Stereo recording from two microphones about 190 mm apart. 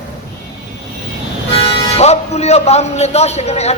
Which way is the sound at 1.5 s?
30° left (ahead or behind).